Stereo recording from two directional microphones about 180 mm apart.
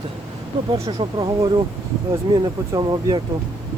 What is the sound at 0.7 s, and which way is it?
Speech, 30° right (ahead or behind).